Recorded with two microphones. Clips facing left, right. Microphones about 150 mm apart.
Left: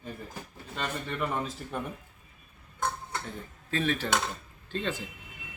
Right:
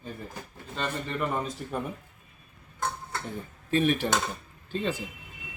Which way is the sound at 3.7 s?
15° right (ahead or behind).